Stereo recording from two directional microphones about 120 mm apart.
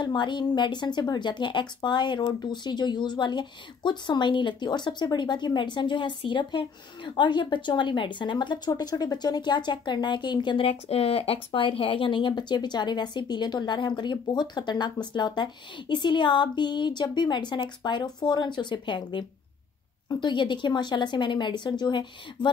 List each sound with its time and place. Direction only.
0.0 s a woman's voice: 40° left (ahead or behind)
10.7 s a woman's voice: 60° left (ahead or behind); by 22.5 s 40° left (ahead or behind)